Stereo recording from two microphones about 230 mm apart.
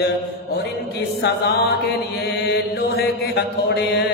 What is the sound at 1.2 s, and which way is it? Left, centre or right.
Mantra, left.